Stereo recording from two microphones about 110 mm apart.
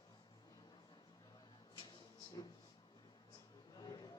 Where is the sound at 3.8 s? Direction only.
35° left (ahead or behind).